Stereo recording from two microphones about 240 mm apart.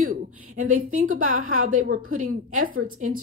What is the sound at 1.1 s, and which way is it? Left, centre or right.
Speech, right.